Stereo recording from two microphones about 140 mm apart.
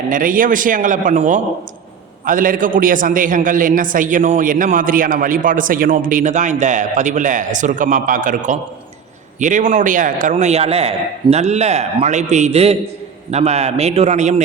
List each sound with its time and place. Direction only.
0.1 s a man's voice: 80° right; by 1.4 s 60° right (ahead or behind)
2.2 s a man's voice: 75° right (ahead or behind); by 14.4 s 55° right (ahead or behind)